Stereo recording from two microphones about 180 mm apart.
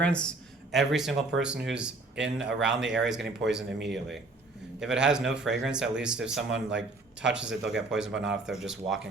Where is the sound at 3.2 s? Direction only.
75° right (ahead or behind).